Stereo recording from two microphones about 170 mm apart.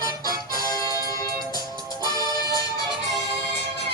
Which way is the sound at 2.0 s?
25° right (ahead or behind).